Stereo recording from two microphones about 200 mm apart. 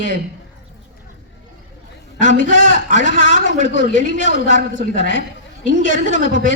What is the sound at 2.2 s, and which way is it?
A woman's voice, 65° left (ahead or behind).